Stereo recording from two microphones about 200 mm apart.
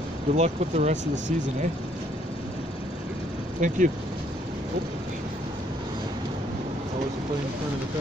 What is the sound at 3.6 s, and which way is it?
Speech, 40° right (ahead or behind).